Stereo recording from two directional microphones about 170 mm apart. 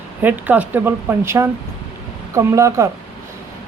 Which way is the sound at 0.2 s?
10° right (ahead or behind).